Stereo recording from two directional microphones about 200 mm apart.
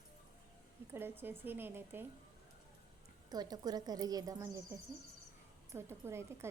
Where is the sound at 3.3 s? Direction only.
20° right (ahead or behind).